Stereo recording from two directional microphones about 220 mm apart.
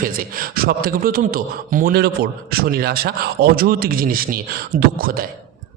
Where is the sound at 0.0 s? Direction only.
40° right (ahead or behind).